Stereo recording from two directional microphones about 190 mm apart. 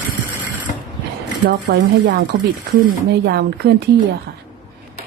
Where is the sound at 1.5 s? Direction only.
55° right (ahead or behind).